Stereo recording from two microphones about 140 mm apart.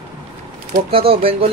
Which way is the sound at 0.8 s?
40° right (ahead or behind).